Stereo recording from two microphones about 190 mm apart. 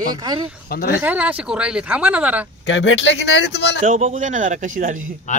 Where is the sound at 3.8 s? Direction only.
40° right (ahead or behind).